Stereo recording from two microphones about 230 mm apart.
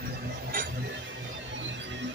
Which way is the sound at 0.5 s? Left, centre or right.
Right.